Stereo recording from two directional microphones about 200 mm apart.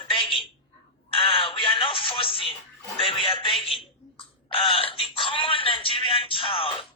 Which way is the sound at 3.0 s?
25° left (ahead or behind).